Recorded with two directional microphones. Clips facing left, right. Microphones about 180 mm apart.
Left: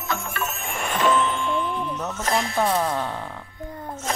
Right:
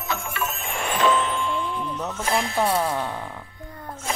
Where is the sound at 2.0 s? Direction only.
10° right (ahead or behind).